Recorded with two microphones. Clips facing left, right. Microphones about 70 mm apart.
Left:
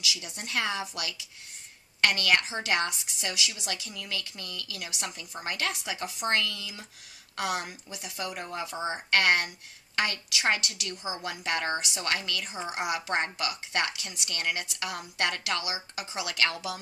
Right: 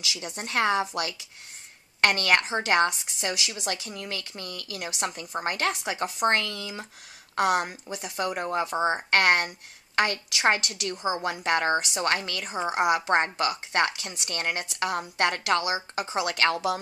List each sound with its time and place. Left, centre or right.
0.0 s a woman's voice: right